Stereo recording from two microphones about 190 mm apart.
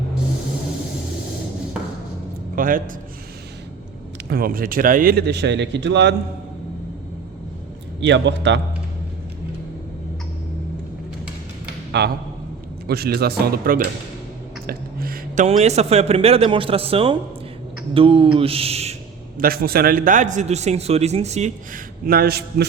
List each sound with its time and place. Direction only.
2.6 s a man's voice: 45° right (ahead or behind)
4.3 s a man's voice: 50° right (ahead or behind); by 6.1 s 65° right (ahead or behind)
8.0 s a man's voice: 70° right (ahead or behind)
11.9 s a man's voice: 60° right (ahead or behind)
14.7 s a sound: 50° right (ahead or behind)
15.4 s a man's voice: 35° right (ahead or behind)
18.3 s a sound: 30° right (ahead or behind)
19.4 s a man's voice: 50° right (ahead or behind)